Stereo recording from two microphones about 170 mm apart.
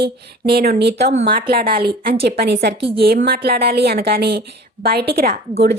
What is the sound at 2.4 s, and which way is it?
Speech, 75° right (ahead or behind).